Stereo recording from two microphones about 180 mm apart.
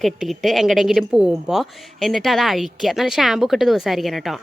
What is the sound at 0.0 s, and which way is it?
A woman's voice, centre (ahead or behind).